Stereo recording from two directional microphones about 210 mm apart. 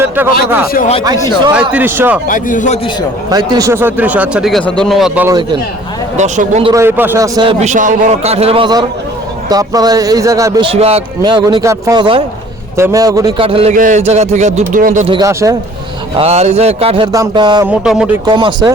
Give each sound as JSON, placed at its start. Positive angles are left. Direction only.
{"t": 0.2, "sound": "a man's voice", "side_deg": -10}
{"t": 1.7, "sound": "a man's voice", "side_deg": -10}
{"t": 2.2, "sound": "a man's voice", "side_deg": 40}
{"t": 3.2, "sound": "a man's voice", "side_deg": -20}
{"t": 5.3, "sound": "a man's voice", "side_deg": -20}
{"t": 6.1, "sound": "speech", "side_deg": -35}
{"t": 6.7, "sound": "a man's voice", "side_deg": -15}
{"t": 7.6, "sound": "a man's voice", "side_deg": -35}
{"t": 15.0, "sound": "a man's voice", "side_deg": -20}
{"t": 16.1, "sound": "a man's voice", "side_deg": -30}
{"t": 17.7, "sound": "speech", "side_deg": -5}
{"t": 18.3, "sound": "a man's voice", "side_deg": -20}